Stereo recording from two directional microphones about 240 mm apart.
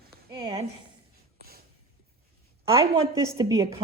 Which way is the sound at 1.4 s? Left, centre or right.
Right.